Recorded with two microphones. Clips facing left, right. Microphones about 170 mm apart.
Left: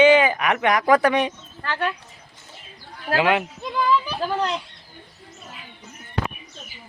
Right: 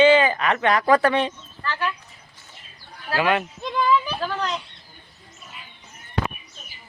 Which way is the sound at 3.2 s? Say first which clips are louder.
Left 1 dB; 15° left (ahead or behind).